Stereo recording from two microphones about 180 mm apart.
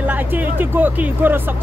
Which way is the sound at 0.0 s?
10° right (ahead or behind).